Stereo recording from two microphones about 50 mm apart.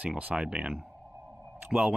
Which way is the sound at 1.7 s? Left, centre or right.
Centre.